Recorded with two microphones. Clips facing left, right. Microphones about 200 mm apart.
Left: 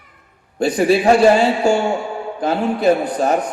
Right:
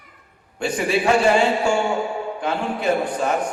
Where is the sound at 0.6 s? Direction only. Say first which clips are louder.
Left 6 dB; 35° left (ahead or behind).